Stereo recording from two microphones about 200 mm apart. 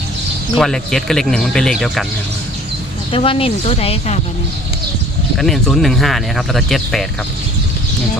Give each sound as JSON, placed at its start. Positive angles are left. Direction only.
{"t": 0.5, "sound": "speech", "side_deg": 0}
{"t": 3.1, "sound": "speech", "side_deg": 25}
{"t": 5.4, "sound": "speech", "side_deg": 0}